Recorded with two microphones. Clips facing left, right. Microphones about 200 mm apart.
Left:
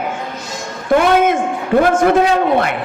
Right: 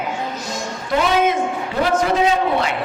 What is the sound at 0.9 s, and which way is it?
A man's voice, 55° left (ahead or behind).